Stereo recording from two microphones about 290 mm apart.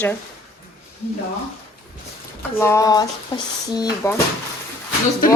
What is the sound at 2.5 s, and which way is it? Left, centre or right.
Speech, centre.